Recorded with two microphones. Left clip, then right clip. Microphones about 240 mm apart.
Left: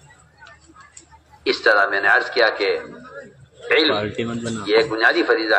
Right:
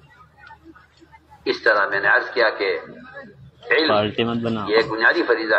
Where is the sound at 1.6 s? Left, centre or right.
Left.